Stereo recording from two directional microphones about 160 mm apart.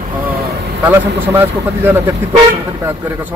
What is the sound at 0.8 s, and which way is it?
Speech, 15° right (ahead or behind).